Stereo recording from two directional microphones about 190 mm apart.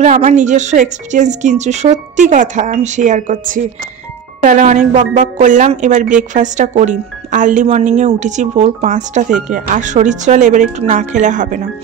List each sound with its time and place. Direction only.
0.0 s a woman's voice: 35° right (ahead or behind)